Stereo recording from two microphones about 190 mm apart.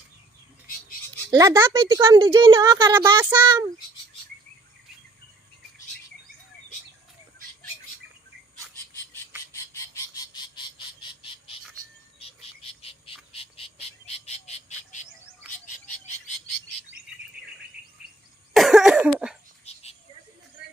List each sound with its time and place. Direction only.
1.3 s speech: 15° right (ahead or behind)
9.7 s frog: 20° left (ahead or behind)
18.5 s cough: centre (ahead or behind)
19.6 s a sound: 30° left (ahead or behind)